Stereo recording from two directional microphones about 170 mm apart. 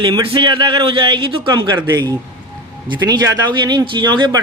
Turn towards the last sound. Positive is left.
turn(degrees=-25)  # may be behind; listen again after turning